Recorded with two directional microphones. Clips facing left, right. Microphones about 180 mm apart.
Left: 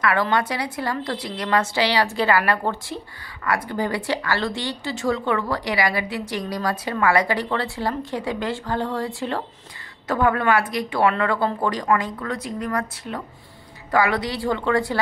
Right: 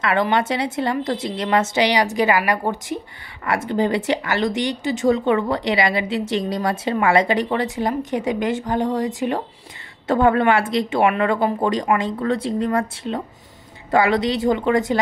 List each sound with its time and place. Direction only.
0.0 s a woman's voice: 20° right (ahead or behind)
10.0 s speech: 25° right (ahead or behind)